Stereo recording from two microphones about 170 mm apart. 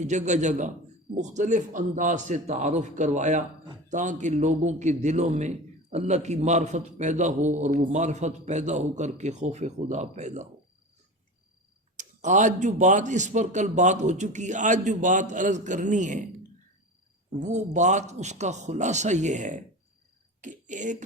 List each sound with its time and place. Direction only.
0.0 s a man's voice: 45° right (ahead or behind)
11.9 s a man's voice: 45° right (ahead or behind)
17.4 s a man's voice: 45° right (ahead or behind)